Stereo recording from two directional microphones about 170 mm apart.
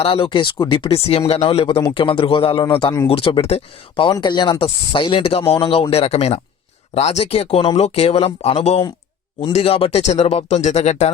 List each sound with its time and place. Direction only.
0.0 s speech: 30° left (ahead or behind)